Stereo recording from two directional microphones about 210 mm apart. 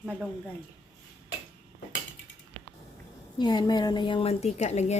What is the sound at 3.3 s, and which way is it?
A woman's voice, 20° left (ahead or behind).